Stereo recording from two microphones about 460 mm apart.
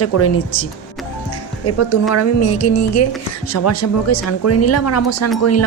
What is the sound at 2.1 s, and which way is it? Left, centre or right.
A woman's voice, left.